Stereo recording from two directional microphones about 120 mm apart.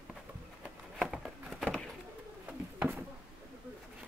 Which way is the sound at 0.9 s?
Centre (ahead or behind).